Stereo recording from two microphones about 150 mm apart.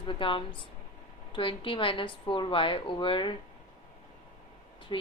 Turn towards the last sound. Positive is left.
turn(degrees=30)  # may be behind; listen again after turning